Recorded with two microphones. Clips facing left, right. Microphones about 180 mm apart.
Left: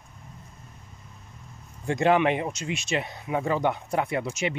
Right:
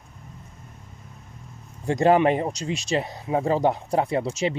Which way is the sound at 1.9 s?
40° right (ahead or behind).